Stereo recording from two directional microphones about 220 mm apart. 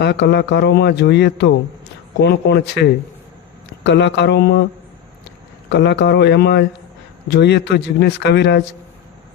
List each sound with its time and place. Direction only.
0.0 s speech: 50° left (ahead or behind)
5.6 s speech: 50° left (ahead or behind)